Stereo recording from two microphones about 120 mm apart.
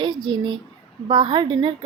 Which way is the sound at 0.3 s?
35° right (ahead or behind).